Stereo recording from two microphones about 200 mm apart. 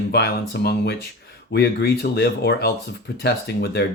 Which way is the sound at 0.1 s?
55° left (ahead or behind).